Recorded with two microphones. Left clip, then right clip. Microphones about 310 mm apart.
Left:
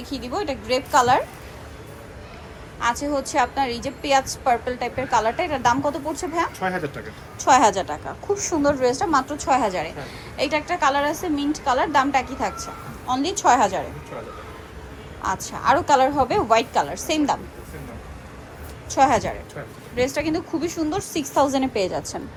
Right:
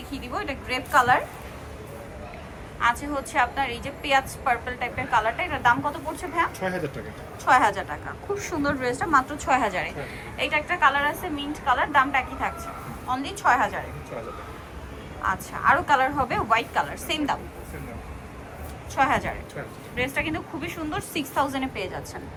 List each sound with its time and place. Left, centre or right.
0.3 s a woman's voice: centre
2.8 s a woman's voice: centre
6.6 s speech: centre
7.3 s a woman's voice: left
8.4 s a woman's voice: centre
15.2 s a woman's voice: centre
18.9 s a woman's voice: centre